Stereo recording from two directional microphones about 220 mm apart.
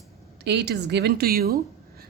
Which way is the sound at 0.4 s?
50° right (ahead or behind).